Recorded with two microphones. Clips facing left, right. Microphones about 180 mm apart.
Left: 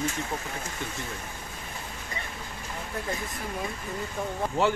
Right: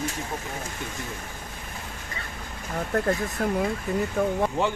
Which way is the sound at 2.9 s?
60° right (ahead or behind).